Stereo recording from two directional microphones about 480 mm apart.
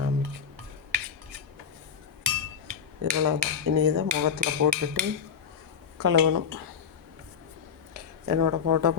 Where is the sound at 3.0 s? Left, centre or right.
Right.